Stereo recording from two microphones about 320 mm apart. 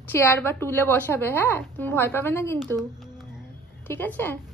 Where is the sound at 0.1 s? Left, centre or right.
Centre.